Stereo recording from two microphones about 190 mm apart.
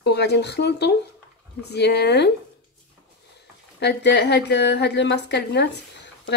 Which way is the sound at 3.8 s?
60° left (ahead or behind).